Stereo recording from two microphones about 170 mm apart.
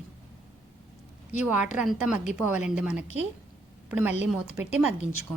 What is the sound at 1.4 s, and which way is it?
A woman's voice, 10° right (ahead or behind).